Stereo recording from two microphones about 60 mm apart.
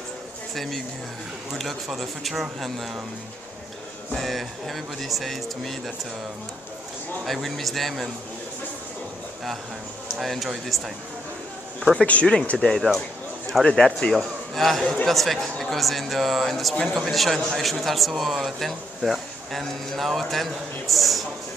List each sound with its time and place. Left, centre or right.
0.6 s speech: centre
4.1 s speech: centre
7.4 s speech: centre
10.1 s speech: centre
11.8 s speech: centre
12.5 s speech: centre
14.1 s a man's voice: centre